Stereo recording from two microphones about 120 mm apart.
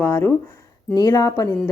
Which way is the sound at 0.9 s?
35° left (ahead or behind).